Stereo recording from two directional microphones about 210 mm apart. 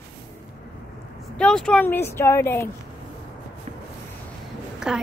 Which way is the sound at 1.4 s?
5° left (ahead or behind).